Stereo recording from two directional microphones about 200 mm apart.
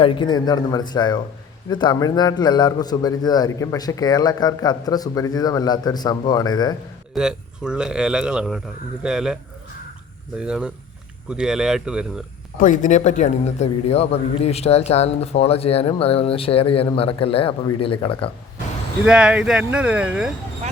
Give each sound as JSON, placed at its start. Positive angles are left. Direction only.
{"t": 0.0, "sound": "a man's voice", "side_deg": 25}
{"t": 7.1, "sound": "speech", "side_deg": -5}
{"t": 12.5, "sound": "a man's voice", "side_deg": 40}
{"t": 19.0, "sound": "speech", "side_deg": -5}